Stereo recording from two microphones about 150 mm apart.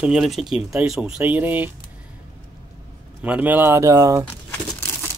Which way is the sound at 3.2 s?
10° right (ahead or behind).